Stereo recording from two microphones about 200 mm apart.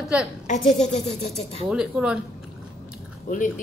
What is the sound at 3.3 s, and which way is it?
Speech, 40° left (ahead or behind).